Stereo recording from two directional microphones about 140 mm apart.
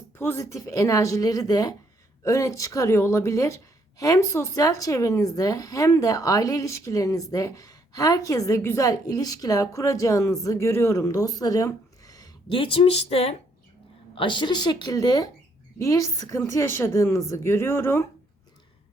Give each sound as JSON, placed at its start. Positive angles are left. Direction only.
{"t": 0.2, "sound": "speech", "side_deg": 20}
{"t": 14.2, "sound": "speech", "side_deg": 35}